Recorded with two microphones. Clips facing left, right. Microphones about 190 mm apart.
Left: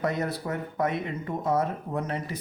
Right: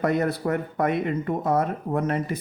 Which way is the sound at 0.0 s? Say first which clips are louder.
Right 6 dB; 60° right (ahead or behind).